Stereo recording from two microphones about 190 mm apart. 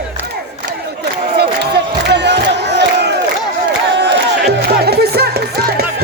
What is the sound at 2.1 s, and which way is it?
Music, 65° right (ahead or behind).